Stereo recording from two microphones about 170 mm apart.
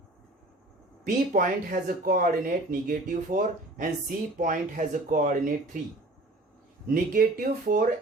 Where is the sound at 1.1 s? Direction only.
55° right (ahead or behind).